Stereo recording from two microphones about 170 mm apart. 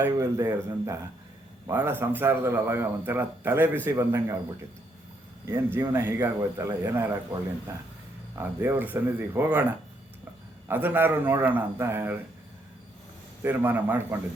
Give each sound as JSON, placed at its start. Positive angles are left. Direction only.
{"t": 0.0, "sound": "a man's voice", "side_deg": -15}
{"t": 5.5, "sound": "a man's voice", "side_deg": -15}
{"t": 8.4, "sound": "a man's voice", "side_deg": -10}
{"t": 13.4, "sound": "a man's voice", "side_deg": -15}